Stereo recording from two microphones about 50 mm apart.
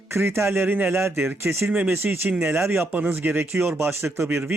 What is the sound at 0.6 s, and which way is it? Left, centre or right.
Speech, right.